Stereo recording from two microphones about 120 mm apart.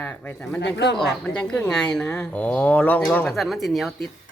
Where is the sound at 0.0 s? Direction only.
10° left (ahead or behind).